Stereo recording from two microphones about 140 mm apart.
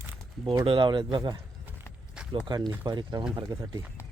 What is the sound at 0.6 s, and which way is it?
Speech, 40° right (ahead or behind).